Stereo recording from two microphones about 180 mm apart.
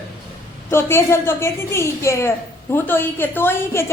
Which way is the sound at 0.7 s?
15° left (ahead or behind).